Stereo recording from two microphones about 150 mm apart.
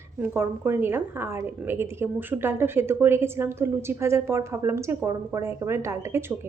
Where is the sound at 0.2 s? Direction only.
15° right (ahead or behind).